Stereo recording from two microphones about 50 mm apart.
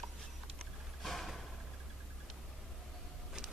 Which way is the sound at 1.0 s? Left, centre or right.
Centre.